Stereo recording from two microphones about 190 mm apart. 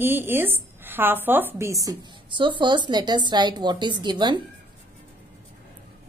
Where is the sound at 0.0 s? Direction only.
10° right (ahead or behind).